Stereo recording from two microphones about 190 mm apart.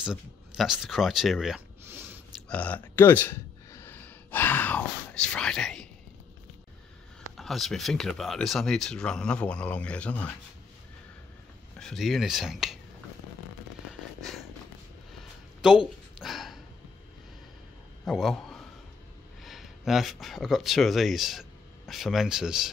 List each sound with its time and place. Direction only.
0.0 s speech: 5° right (ahead or behind)
2.4 s speech: 5° left (ahead or behind)
7.3 s speech: centre (ahead or behind)
11.8 s speech: centre (ahead or behind)
15.6 s speech: 5° right (ahead or behind)
16.2 s a sound: centre (ahead or behind)
18.0 s a man's voice: centre (ahead or behind)